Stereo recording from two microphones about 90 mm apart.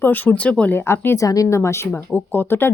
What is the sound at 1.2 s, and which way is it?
Speech, 40° left (ahead or behind).